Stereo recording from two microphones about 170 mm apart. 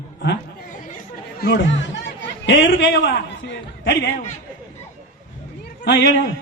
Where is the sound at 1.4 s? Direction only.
80° left.